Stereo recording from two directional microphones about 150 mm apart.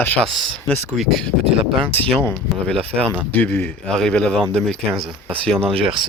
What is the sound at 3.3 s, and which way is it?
Speech, 10° left (ahead or behind).